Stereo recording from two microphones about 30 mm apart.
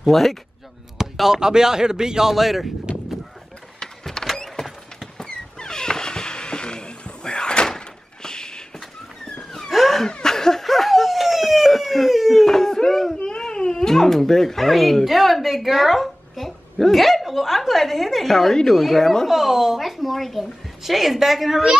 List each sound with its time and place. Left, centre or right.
0.1 s speech: centre
1.0 s chop: centre
1.4 s a man's voice: right
2.3 s a woman's voice: centre
4.2 s mechanisms: left
5.1 s a sound: left
7.7 s thunk: left
9.7 s a sound: centre
10.2 s laughter: centre
10.6 s a sound: centre
12.4 s a sound: centre
13.9 s a woman's voice: centre
18.5 s speech: centre
19.2 s a woman's voice: centre